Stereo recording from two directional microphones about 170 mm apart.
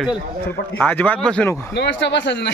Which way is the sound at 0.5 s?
10° left (ahead or behind).